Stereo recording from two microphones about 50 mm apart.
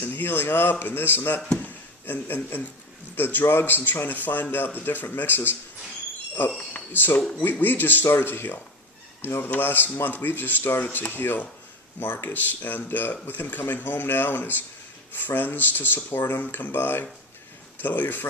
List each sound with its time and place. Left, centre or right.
0.0 s speech: left
1.5 s a sound: left
3.2 s speech: left
6.9 s speech: left
10.8 s speech: left
11.1 s speech: left